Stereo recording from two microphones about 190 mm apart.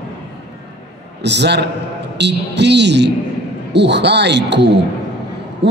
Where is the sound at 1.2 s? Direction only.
65° right (ahead or behind).